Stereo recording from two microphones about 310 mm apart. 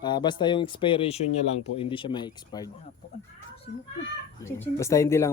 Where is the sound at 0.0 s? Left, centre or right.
Centre.